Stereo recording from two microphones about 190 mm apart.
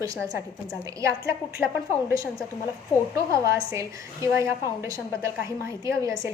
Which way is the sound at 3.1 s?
15° right (ahead or behind).